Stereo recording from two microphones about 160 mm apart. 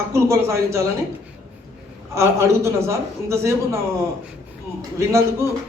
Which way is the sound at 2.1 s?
15° right (ahead or behind).